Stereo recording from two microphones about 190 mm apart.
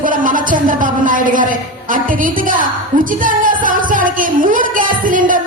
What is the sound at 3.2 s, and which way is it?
Music, 45° right (ahead or behind).